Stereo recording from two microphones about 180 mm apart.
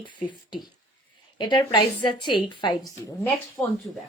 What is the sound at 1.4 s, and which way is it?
Speech, 25° left (ahead or behind).